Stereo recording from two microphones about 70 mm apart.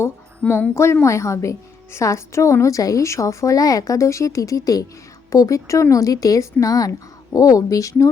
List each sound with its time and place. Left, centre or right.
0.7 s a woman's voice: left